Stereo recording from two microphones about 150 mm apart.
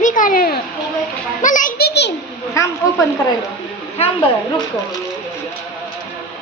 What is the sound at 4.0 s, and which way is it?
Speech, 40° left (ahead or behind).